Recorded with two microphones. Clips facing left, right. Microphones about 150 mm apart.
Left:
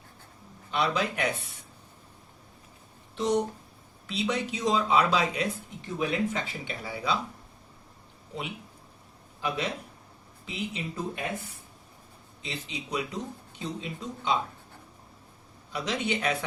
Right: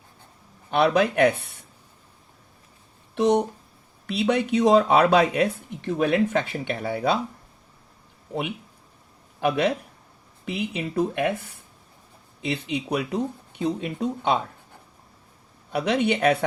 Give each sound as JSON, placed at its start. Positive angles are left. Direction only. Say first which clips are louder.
{"t": 0.7, "sound": "speech", "louder": "right 8 dB", "side_deg": -60}
{"t": 3.2, "sound": "speech", "louder": "right 6 dB", "side_deg": -60}
{"t": 8.3, "sound": "speech", "louder": "right 8 dB", "side_deg": -60}
{"t": 15.7, "sound": "speech", "louder": "right 8 dB", "side_deg": -60}